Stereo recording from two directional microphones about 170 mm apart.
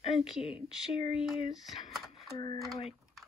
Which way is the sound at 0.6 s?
30° left (ahead or behind).